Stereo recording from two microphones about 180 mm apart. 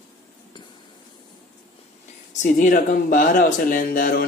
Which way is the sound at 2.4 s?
50° left (ahead or behind).